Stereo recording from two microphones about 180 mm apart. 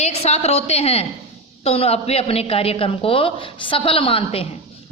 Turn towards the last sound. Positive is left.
turn(degrees=30)  # may be behind; listen again after turning